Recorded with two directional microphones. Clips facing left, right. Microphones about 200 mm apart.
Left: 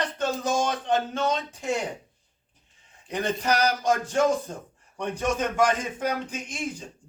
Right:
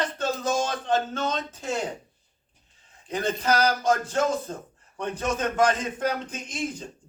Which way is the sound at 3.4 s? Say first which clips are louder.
Right 2 dB; 15° left (ahead or behind).